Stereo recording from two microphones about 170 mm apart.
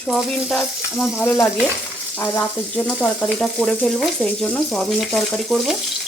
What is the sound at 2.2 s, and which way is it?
Frying, 10° left (ahead or behind).